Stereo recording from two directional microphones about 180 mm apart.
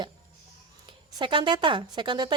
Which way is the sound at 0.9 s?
25° right (ahead or behind).